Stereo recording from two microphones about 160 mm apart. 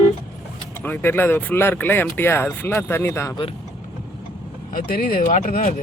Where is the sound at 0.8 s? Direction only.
10° left (ahead or behind).